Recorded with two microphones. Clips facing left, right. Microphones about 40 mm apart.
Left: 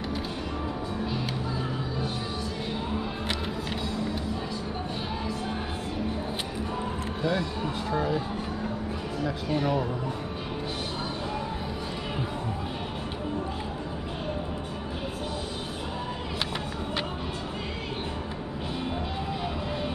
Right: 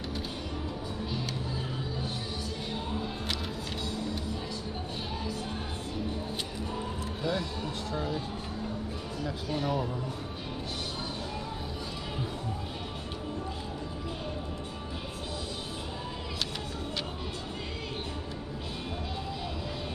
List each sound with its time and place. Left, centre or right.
2.7 s music: centre
7.2 s speech: centre
9.2 s speech: centre